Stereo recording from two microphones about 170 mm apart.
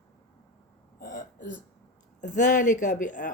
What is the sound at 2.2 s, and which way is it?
Speech, 45° left (ahead or behind).